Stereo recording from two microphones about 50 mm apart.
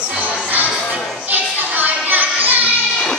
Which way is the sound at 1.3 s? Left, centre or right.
Right.